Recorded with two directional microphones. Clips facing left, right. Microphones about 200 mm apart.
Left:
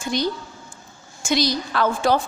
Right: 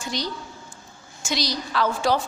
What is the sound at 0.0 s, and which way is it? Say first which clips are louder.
A woman's voice: left 6 dB; 55° left (ahead or behind).